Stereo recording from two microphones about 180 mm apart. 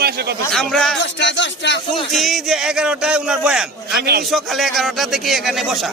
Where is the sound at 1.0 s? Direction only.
80° left.